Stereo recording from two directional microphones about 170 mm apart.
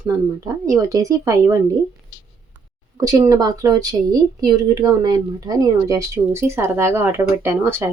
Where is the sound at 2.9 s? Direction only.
20° right (ahead or behind).